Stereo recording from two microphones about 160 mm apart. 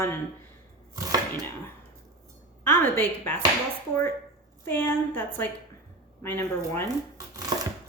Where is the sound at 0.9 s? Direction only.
25° right (ahead or behind).